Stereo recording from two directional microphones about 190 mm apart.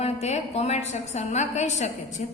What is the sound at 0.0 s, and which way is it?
A woman's voice, 35° left (ahead or behind).